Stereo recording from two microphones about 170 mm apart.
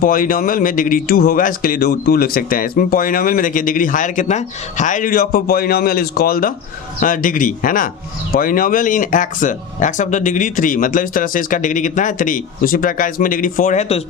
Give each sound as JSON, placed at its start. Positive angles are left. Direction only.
{"t": 0.0, "sound": "speech", "side_deg": 55}